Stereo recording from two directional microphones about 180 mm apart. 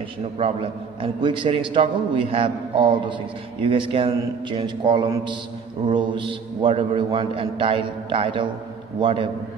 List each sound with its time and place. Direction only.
0.4 s a man's voice: 30° right (ahead or behind)